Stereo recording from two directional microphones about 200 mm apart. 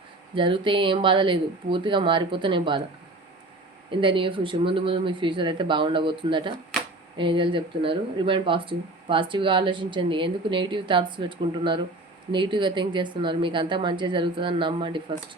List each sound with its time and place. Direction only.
0.3 s speech: 25° right (ahead or behind)
4.0 s speech: 25° right (ahead or behind)
6.7 s a sound: centre (ahead or behind)
7.2 s speech: 25° right (ahead or behind)